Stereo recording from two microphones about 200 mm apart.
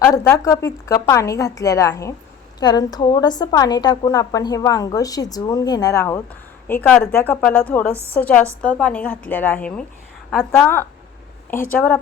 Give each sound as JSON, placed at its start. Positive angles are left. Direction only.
{"t": 0.0, "sound": "a woman's voice", "side_deg": 15}